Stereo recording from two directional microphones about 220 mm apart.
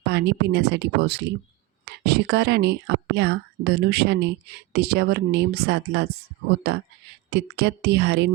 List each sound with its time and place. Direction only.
0.0 s speech: 50° right (ahead or behind)